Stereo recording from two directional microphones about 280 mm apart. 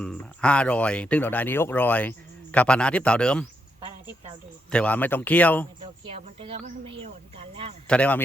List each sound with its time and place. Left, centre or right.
0.0 s speech: centre
4.7 s speech: centre
5.8 s speech: centre
7.9 s speech: centre